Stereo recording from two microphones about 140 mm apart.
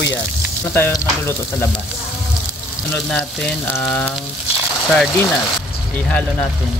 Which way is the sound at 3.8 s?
5° left (ahead or behind).